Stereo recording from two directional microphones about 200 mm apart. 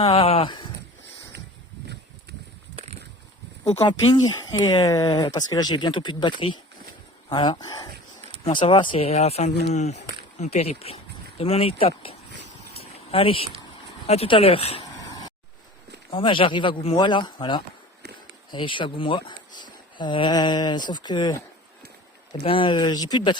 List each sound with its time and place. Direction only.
0.0 s a sound: 30° left (ahead or behind)
3.8 s speech: 25° left (ahead or behind)
12.7 s a sound: 30° left (ahead or behind)
14.1 s speech: 30° left (ahead or behind)
16.0 s speech: 25° left (ahead or behind)
22.4 s speech: 25° left (ahead or behind)